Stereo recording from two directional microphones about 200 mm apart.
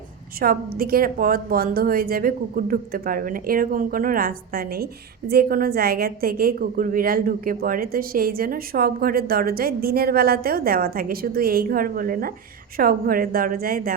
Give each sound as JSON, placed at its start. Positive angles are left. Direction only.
{"t": 0.3, "sound": "a woman's voice", "side_deg": -45}